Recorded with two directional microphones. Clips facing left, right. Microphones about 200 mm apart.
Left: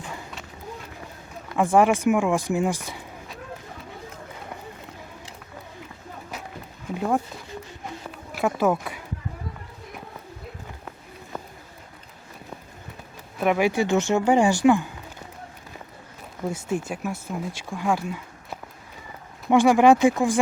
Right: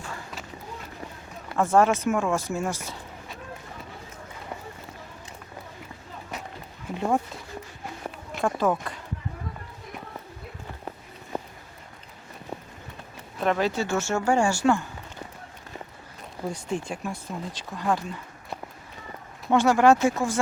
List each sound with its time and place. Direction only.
1.5 s speech: 15° left (ahead or behind)
6.3 s music: centre (ahead or behind)
6.9 s speech: centre (ahead or behind)
8.3 s speech: 5° left (ahead or behind)
13.4 s speech: 10° left (ahead or behind)
16.5 s speech: 5° left (ahead or behind)